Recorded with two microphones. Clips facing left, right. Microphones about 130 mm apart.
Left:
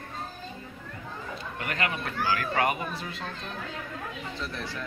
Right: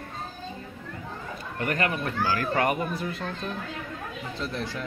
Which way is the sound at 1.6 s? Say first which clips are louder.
Right 5 dB; 40° right (ahead or behind).